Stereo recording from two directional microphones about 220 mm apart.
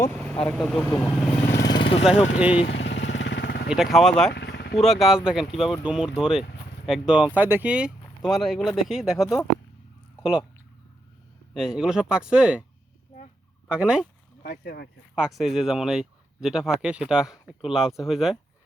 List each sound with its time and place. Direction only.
0.0 s vehicle: 5° left (ahead or behind)
0.5 s speech: centre (ahead or behind)
1.5 s vehicle: 50° left (ahead or behind)
1.7 s vehicle: 25° left (ahead or behind)
2.6 s motorcycle: 55° left (ahead or behind)
3.7 s speech: centre (ahead or behind)
4.4 s vehicle: 50° left (ahead or behind)
4.8 s speech: centre (ahead or behind)
11.5 s speech: centre (ahead or behind)
13.7 s speech: 5° right (ahead or behind)
14.4 s speech: 40° left (ahead or behind)
15.1 s speech: centre (ahead or behind)